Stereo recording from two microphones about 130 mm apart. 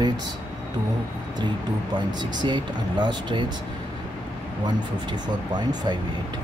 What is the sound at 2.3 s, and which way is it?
Speech, 35° right (ahead or behind).